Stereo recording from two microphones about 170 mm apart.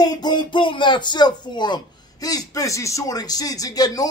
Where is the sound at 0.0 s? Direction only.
25° left (ahead or behind).